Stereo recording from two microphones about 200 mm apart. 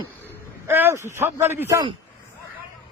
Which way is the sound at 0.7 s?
10° right (ahead or behind).